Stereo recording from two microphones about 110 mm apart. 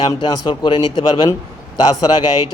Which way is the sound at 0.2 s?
45° left (ahead or behind).